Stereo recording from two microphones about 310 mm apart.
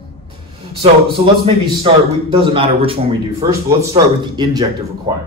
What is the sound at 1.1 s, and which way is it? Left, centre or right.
Speech, centre.